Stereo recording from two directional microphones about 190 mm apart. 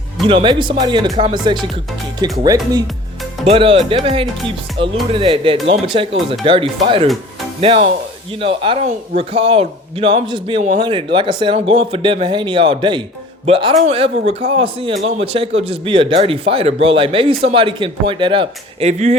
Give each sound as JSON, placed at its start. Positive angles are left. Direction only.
{"t": 0.3, "sound": "speech", "side_deg": -25}